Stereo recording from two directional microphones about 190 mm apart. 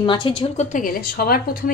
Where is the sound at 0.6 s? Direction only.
45° left (ahead or behind).